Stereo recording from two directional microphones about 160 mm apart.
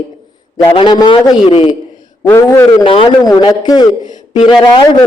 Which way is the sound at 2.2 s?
20° left (ahead or behind).